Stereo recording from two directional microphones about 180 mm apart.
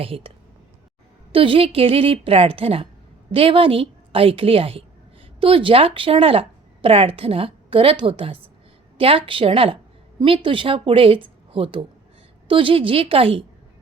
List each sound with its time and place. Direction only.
0.0 s speech: 30° right (ahead or behind)